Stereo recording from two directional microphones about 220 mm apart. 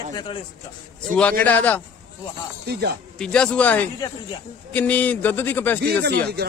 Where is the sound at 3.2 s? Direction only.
5° left (ahead or behind).